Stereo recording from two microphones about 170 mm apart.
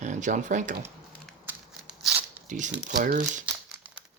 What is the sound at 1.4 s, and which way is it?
Scissors, 5° right (ahead or behind).